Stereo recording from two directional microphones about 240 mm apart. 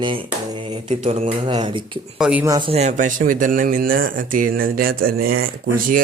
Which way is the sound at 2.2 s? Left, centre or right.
Centre.